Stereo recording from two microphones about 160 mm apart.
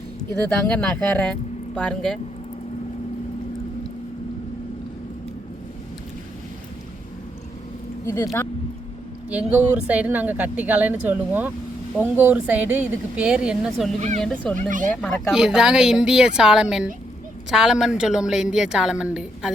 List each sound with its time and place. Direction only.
0.7 s speech: 5° left (ahead or behind)
8.0 s speech: 20° left (ahead or behind)
9.3 s a woman's voice: 10° right (ahead or behind)
14.5 s speech: 55° right (ahead or behind)
15.0 s a woman's voice: 5° right (ahead or behind)